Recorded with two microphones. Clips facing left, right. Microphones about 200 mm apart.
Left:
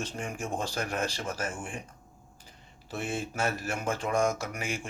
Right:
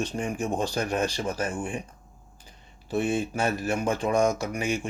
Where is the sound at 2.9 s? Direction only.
15° right (ahead or behind).